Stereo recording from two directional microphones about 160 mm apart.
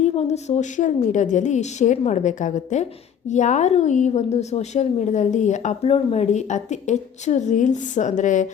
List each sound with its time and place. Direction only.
0.0 s a woman's voice: 45° left (ahead or behind)